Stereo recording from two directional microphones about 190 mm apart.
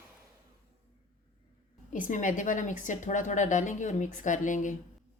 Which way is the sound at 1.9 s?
45° left (ahead or behind).